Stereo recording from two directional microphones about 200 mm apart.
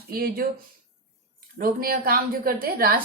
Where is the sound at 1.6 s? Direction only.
45° right (ahead or behind).